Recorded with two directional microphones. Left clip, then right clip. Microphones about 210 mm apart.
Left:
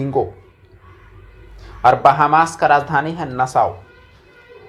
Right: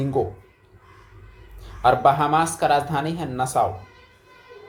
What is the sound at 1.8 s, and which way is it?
Speech, 10° left (ahead or behind).